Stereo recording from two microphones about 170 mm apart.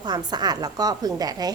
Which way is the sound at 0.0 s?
25° right (ahead or behind).